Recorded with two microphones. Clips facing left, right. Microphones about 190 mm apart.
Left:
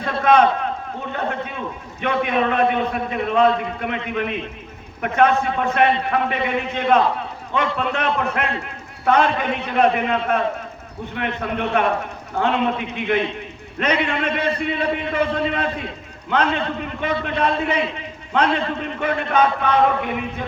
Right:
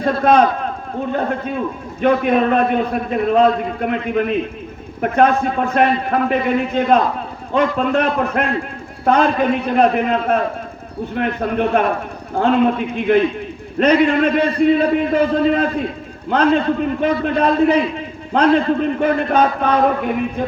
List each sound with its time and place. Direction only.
0.0 s a man's voice: 35° right (ahead or behind)